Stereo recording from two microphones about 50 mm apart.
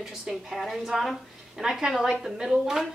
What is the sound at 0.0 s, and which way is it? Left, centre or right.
A woman's voice, centre.